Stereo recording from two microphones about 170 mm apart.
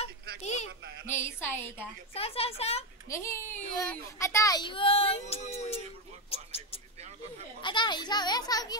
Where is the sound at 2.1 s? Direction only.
35° left (ahead or behind).